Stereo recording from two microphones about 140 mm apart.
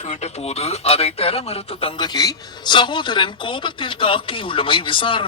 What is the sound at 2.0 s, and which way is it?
Speech, 30° left (ahead or behind).